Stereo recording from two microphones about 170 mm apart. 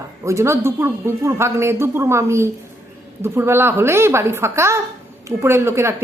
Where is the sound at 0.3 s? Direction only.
15° right (ahead or behind).